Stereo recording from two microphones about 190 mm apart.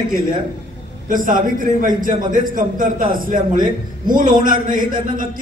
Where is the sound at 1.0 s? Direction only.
45° right (ahead or behind).